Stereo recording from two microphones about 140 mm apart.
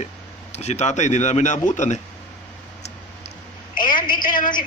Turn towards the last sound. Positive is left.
turn(degrees=80)